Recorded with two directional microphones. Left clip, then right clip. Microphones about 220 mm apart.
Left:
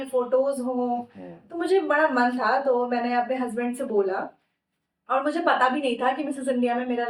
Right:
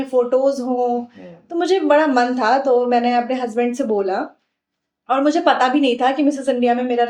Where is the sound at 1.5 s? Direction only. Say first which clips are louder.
Right 7 dB; 45° right (ahead or behind).